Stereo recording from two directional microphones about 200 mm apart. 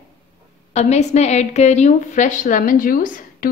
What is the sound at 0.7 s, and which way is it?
A woman's voice, 35° left (ahead or behind).